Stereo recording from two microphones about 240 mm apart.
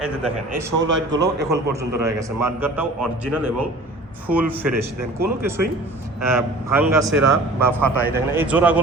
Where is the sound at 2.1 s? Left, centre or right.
Centre.